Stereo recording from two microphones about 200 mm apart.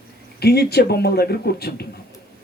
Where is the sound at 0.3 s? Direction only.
55° left (ahead or behind).